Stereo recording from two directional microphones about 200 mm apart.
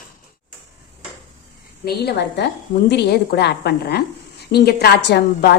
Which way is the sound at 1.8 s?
55° left (ahead or behind).